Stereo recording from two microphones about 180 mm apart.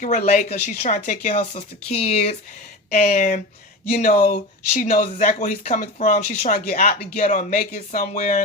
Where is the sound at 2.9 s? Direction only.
50° left (ahead or behind).